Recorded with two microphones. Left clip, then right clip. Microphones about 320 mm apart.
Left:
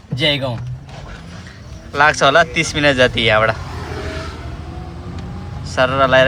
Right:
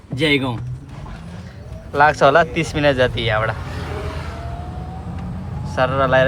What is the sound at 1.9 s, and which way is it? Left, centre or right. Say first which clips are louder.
Speech: left 1 dB; centre.